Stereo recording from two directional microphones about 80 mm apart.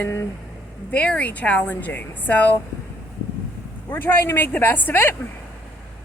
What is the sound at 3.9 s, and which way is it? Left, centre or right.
Speech, left.